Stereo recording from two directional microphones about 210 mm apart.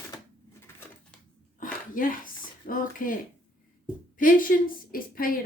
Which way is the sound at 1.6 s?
40° left (ahead or behind).